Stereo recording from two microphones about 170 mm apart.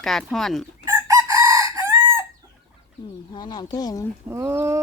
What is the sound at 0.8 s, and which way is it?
Chicken, 20° right (ahead or behind).